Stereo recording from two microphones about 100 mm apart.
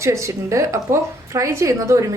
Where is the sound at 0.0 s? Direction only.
30° right (ahead or behind).